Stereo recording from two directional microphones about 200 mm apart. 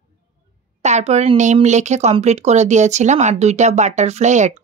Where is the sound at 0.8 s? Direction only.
35° right (ahead or behind).